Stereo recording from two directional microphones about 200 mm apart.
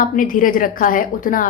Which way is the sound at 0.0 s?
45° left (ahead or behind).